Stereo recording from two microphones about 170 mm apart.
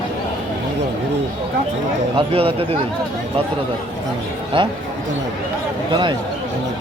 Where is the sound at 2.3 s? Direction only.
35° right (ahead or behind).